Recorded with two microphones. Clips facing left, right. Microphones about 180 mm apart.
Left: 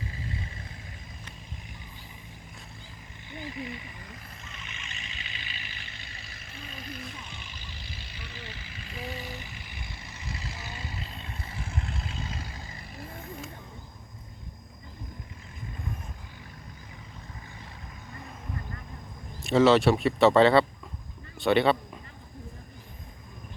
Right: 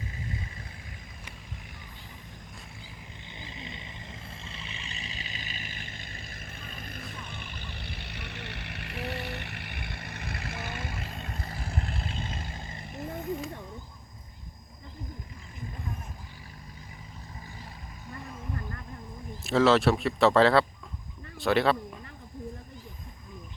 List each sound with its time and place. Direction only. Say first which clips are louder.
3.2 s vehicle: left 8 dB; 20° right (ahead or behind)
19.4 s speech: left 2 dB; centre (ahead or behind)